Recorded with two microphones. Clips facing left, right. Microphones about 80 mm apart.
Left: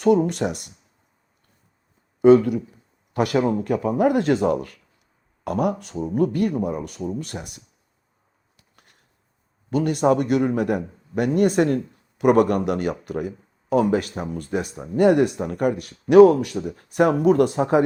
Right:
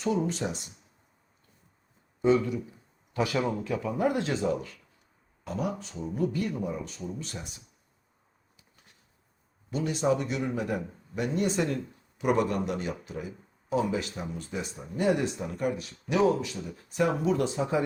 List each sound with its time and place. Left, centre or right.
0.0 s speech: left
2.2 s speech: left
8.5 s a sound: left
9.6 s speech: left